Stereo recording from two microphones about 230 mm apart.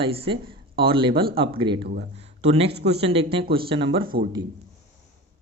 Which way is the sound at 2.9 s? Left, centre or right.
Right.